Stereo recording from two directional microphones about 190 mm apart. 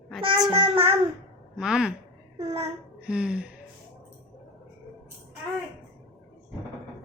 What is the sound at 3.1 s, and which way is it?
Speech, 5° right (ahead or behind).